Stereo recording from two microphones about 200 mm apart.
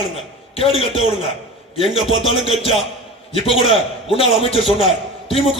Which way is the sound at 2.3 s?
30° left (ahead or behind).